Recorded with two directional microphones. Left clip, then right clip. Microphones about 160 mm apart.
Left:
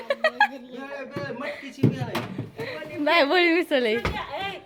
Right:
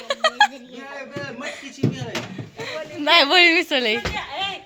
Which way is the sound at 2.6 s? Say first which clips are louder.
Right 2 dB; 10° left (ahead or behind).